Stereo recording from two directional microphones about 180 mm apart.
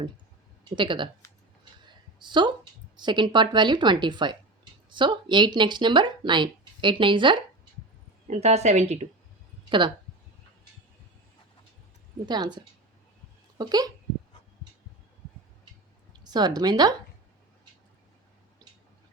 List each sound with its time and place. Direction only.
0.8 s speech: 25° right (ahead or behind)
8.3 s a woman's voice: 40° right (ahead or behind)
9.6 s speech: 25° right (ahead or behind)
12.2 s speech: 25° right (ahead or behind)
16.2 s speech: 20° right (ahead or behind)